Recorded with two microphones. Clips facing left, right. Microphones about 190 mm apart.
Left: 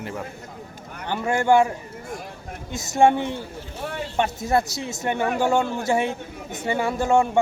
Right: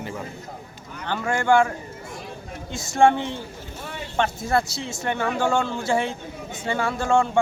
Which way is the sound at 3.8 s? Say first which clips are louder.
Left 6 dB; 45° left (ahead or behind).